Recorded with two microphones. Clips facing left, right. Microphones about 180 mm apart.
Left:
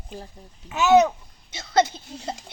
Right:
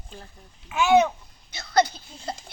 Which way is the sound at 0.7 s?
40° left (ahead or behind).